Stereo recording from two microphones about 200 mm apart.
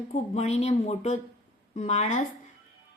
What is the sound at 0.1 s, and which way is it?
A woman's voice, 35° left (ahead or behind).